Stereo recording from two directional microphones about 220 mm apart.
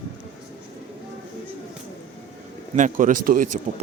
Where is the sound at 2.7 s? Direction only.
35° right (ahead or behind).